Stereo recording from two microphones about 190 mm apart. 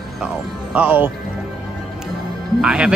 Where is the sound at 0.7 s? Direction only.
10° right (ahead or behind).